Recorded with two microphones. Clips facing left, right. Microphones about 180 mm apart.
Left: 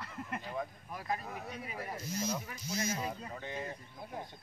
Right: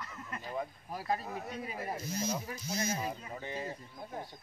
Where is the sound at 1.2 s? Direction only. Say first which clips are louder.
Right 3 dB; centre (ahead or behind).